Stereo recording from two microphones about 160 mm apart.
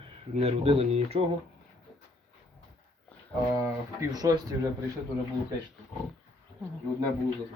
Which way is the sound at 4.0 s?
25° right (ahead or behind).